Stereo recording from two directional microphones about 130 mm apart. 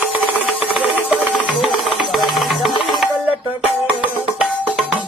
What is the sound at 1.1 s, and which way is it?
Music, 10° right (ahead or behind).